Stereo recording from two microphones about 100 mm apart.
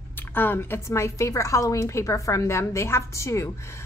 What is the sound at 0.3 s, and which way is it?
A woman's voice, 20° left (ahead or behind).